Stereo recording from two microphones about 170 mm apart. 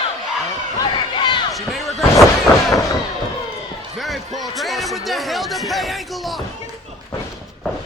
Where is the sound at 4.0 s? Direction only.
Centre (ahead or behind).